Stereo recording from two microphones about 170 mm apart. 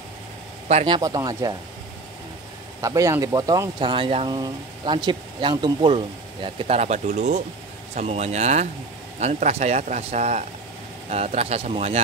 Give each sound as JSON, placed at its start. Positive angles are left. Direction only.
{"t": 0.7, "sound": "speech", "side_deg": -35}
{"t": 2.8, "sound": "speech", "side_deg": -20}
{"t": 3.8, "sound": "speech", "side_deg": -30}